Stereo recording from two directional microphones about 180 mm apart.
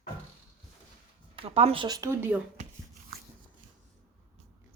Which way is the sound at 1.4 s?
35° right (ahead or behind).